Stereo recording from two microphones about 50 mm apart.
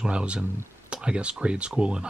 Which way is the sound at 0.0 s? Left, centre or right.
Right.